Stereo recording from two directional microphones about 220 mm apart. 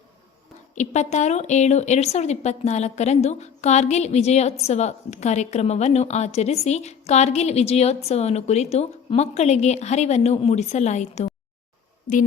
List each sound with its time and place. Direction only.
0.8 s a woman's voice: 30° left (ahead or behind)